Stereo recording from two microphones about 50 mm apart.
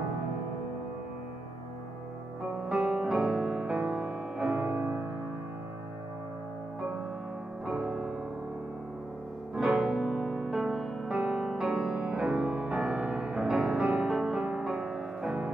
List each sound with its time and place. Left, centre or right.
2.7 s music: centre
4.6 s music: right
7.6 s music: centre
9.6 s music: centre
13.6 s music: centre